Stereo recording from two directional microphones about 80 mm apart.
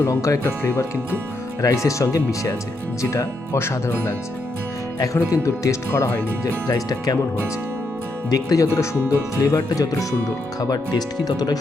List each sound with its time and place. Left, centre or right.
0.0 s speech: left
5.1 s speech: left
8.3 s speech: left